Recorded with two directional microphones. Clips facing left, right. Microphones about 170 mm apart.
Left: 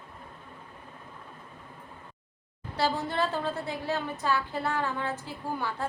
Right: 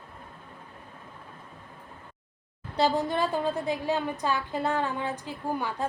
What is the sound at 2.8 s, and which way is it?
A woman's voice, 15° right (ahead or behind).